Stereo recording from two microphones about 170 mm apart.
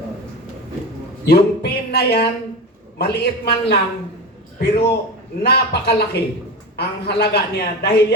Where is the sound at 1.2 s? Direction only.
70° left (ahead or behind).